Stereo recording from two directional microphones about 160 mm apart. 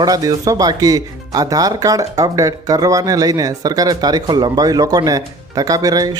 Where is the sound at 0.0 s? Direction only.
20° right (ahead or behind).